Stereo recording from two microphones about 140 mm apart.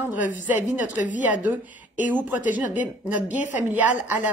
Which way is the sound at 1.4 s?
10° right (ahead or behind).